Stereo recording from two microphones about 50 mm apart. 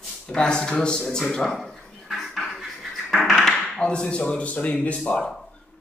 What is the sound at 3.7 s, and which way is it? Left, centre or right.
A man's voice, centre.